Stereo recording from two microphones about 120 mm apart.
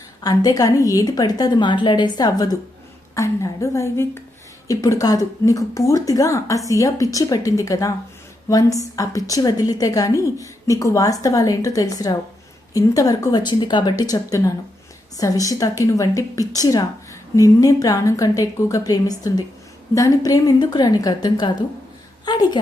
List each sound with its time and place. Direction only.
0.2 s a woman's voice: 30° left (ahead or behind)